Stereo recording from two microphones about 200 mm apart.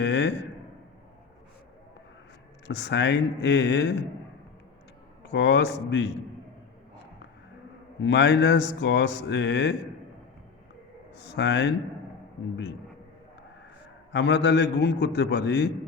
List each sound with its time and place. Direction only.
0.0 s a sound: 65° left (ahead or behind)
2.6 s speech: 60° left (ahead or behind)
5.2 s speech: 60° left (ahead or behind)
8.0 s speech: 60° left (ahead or behind)
11.3 s speech: 60° left (ahead or behind)
14.1 s speech: 60° left (ahead or behind)